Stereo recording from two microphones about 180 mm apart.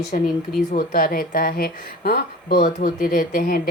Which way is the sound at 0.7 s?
50° left (ahead or behind).